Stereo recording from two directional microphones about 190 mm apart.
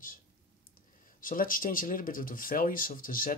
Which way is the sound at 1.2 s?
45° left (ahead or behind).